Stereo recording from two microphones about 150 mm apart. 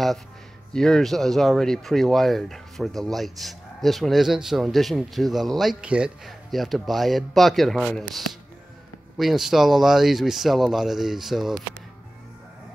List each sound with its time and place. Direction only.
0.7 s speech: 5° left (ahead or behind)